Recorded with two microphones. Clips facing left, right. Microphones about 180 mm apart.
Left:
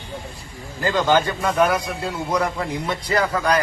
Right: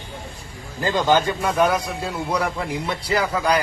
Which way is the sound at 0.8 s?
15° right (ahead or behind).